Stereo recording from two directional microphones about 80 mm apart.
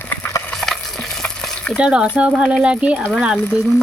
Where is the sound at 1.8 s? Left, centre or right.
Centre.